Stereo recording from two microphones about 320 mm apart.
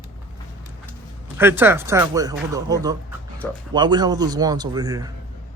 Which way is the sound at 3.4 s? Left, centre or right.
Centre.